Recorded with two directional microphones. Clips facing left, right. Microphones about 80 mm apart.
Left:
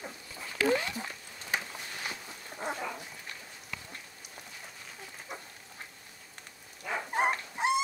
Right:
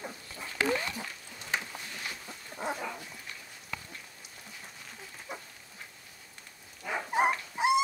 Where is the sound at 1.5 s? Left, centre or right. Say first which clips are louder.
Even; centre.